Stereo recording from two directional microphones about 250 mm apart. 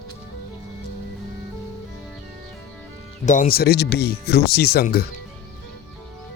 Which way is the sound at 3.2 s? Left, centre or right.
Left.